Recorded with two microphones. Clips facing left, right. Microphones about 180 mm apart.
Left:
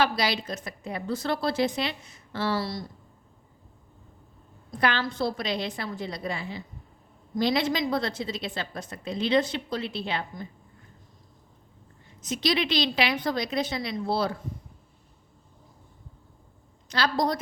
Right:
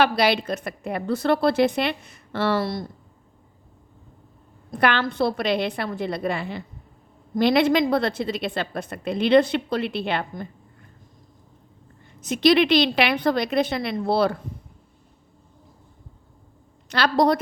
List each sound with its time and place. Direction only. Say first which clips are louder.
0.0 s a woman's voice: right 6 dB; 60° right (ahead or behind)
4.7 s a woman's voice: right 5 dB; 60° right (ahead or behind)
12.2 s a woman's voice: right 9 dB; 60° right (ahead or behind)
16.9 s a woman's voice: right 6 dB; 65° right (ahead or behind)